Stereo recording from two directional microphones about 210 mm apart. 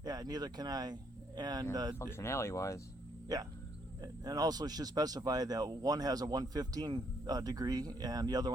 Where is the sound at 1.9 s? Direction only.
10° left (ahead or behind).